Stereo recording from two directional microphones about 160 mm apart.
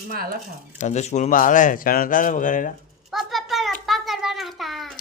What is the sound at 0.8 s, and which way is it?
Speech, 45° left (ahead or behind).